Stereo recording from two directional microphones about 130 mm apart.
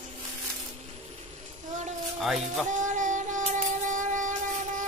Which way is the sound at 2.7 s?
75° right (ahead or behind).